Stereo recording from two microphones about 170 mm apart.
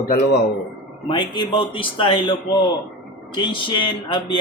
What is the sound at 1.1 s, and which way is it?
A man's voice, 30° left (ahead or behind).